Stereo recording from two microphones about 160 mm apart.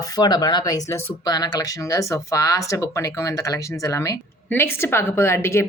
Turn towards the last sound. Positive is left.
turn(degrees=15)  # may be behind; listen again after turning